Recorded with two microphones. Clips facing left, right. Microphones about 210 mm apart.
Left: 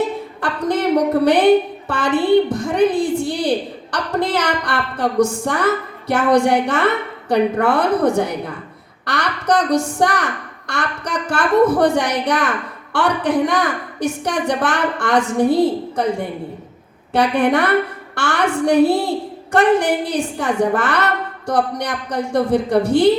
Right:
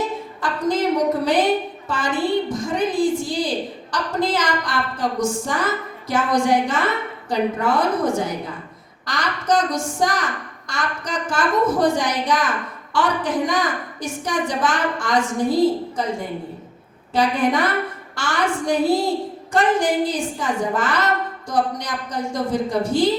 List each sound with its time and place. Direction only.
0.4 s a woman's voice: 65° left (ahead or behind)
17.1 s a woman's voice: 65° left (ahead or behind)